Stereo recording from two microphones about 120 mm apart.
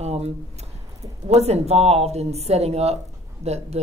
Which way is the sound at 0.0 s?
65° right (ahead or behind).